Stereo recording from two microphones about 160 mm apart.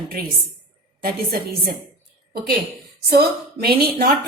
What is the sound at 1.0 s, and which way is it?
Speech, 70° right (ahead or behind).